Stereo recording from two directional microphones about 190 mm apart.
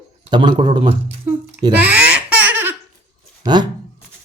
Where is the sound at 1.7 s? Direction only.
5° right (ahead or behind).